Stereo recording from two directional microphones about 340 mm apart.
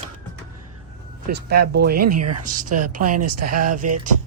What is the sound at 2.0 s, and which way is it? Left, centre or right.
Speech, right.